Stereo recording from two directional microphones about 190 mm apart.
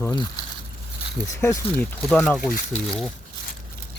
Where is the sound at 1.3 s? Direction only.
15° left (ahead or behind).